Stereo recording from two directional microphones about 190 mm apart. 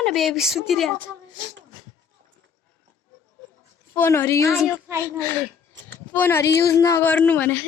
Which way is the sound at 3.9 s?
10° left (ahead or behind).